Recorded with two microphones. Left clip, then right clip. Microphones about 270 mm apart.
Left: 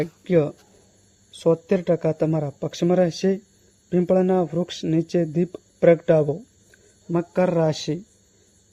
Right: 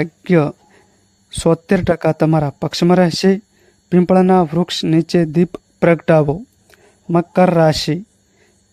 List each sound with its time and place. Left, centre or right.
0.0 s speech: right